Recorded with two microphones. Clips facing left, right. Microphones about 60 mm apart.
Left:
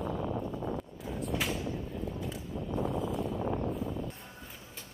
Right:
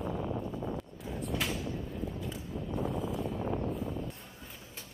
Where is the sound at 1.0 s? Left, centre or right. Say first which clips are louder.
Left 1 dB; centre.